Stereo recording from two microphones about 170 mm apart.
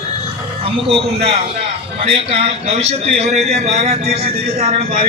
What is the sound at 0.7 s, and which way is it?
A man's voice, 35° right (ahead or behind).